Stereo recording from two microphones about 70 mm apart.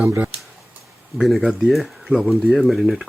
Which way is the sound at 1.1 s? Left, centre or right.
Centre.